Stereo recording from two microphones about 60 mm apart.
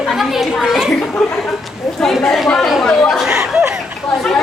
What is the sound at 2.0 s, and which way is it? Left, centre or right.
Speech, centre.